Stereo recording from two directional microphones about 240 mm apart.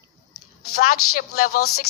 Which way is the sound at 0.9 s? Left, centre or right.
Left.